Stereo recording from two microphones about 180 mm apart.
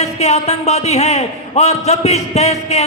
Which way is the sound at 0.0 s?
35° left (ahead or behind).